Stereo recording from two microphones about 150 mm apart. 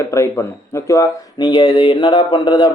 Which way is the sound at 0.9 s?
25° left (ahead or behind).